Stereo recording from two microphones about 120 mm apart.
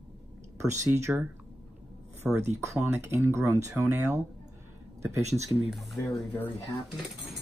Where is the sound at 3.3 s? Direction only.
25° right (ahead or behind).